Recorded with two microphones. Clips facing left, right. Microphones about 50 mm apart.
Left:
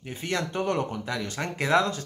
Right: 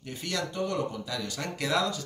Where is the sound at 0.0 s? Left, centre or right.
Left.